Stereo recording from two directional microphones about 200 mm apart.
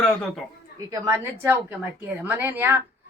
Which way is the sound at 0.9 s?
15° right (ahead or behind).